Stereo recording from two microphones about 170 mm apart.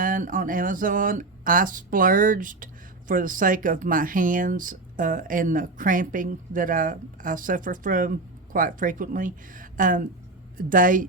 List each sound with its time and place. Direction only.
0.0 s speech: 55° right (ahead or behind)